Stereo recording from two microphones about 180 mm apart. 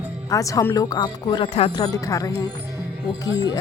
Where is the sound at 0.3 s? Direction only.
20° left (ahead or behind).